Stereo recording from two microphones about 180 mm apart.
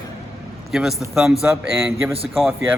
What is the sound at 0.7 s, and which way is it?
A man's voice, centre (ahead or behind).